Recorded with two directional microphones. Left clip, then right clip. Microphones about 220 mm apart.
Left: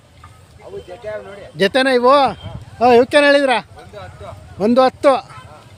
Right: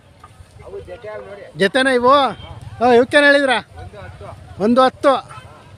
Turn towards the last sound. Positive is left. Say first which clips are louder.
# left 1 dB
turn(degrees=0)  # may be behind; listen again after turning